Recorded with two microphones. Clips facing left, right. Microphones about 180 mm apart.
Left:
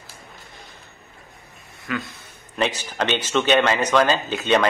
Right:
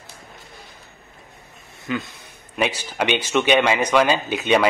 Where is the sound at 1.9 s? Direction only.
20° right (ahead or behind).